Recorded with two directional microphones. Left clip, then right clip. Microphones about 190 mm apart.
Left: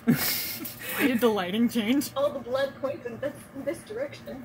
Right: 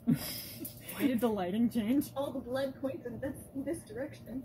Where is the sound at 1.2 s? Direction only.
45° left (ahead or behind).